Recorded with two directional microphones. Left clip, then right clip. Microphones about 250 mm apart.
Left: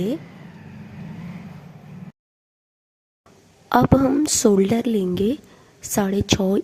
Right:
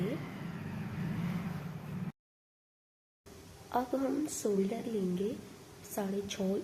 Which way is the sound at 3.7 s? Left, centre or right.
Left.